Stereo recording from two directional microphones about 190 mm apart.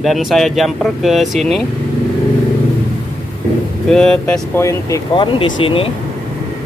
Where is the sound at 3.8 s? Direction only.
5° left (ahead or behind); by 5.9 s 30° left (ahead or behind).